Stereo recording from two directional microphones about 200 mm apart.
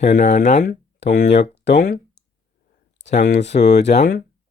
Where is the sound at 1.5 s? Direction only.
55° left (ahead or behind).